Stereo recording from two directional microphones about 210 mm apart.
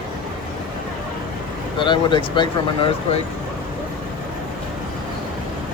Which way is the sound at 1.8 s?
25° left (ahead or behind).